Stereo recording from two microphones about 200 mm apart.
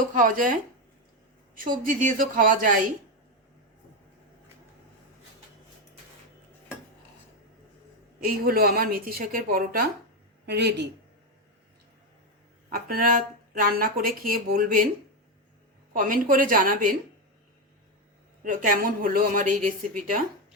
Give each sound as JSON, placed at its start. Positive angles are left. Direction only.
{"t": 0.1, "sound": "speech", "side_deg": -40}
{"t": 1.6, "sound": "speech", "side_deg": -40}
{"t": 8.2, "sound": "speech", "side_deg": -50}
{"t": 12.7, "sound": "speech", "side_deg": -45}
{"t": 15.9, "sound": "speech", "side_deg": -40}
{"t": 18.4, "sound": "speech", "side_deg": -40}